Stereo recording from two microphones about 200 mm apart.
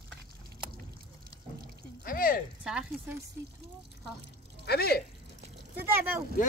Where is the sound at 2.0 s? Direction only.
45° left (ahead or behind).